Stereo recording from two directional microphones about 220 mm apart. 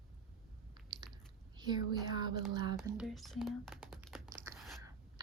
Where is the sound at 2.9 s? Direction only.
Centre (ahead or behind).